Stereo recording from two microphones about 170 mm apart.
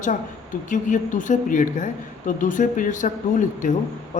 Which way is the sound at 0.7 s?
50° left (ahead or behind).